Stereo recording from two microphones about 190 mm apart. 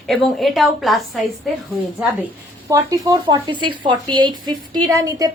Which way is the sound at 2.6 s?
20° right (ahead or behind).